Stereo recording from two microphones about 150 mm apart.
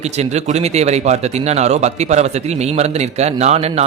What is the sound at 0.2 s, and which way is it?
Speech, 50° right (ahead or behind).